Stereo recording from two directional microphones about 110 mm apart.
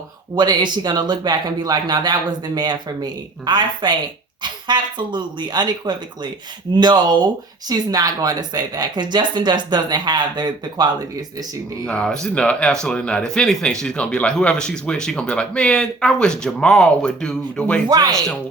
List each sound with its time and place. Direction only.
0.3 s a woman's voice: 40° right (ahead or behind)
11.9 s speech: 10° left (ahead or behind)
17.8 s a woman's voice: 35° right (ahead or behind)